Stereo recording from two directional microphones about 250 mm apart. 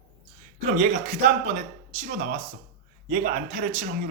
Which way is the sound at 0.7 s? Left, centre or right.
Right.